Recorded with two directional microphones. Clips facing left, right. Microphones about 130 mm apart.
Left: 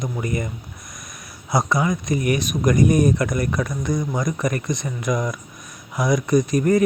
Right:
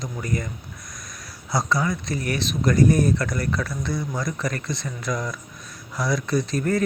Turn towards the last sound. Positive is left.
turn(degrees=15)  # may be behind; listen again after turning